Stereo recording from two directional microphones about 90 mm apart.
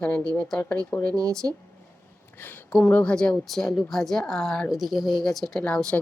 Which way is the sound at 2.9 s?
10° left (ahead or behind).